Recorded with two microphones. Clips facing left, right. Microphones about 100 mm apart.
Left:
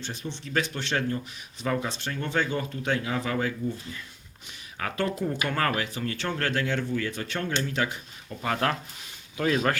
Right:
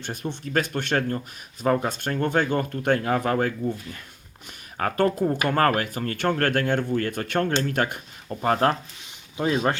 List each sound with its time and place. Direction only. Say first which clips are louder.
0.0 s speech: right 5 dB; 50° right (ahead or behind)
4.8 s speech: right 6 dB; 45° right (ahead or behind)
9.4 s speech: right 2 dB; 25° right (ahead or behind)